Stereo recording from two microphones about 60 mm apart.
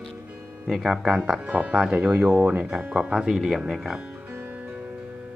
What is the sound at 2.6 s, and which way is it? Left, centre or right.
Speech, centre.